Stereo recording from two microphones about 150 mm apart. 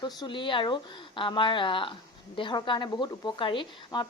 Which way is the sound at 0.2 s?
35° left (ahead or behind).